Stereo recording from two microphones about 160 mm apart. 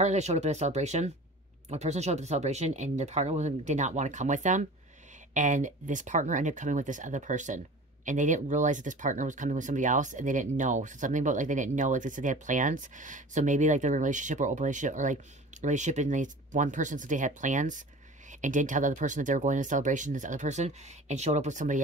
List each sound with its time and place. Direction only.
0.0 s speech: 45° right (ahead or behind)